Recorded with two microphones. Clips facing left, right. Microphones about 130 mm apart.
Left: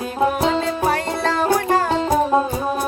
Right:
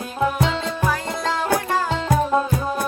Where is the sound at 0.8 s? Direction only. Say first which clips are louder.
Left 1 dB; 60° left (ahead or behind).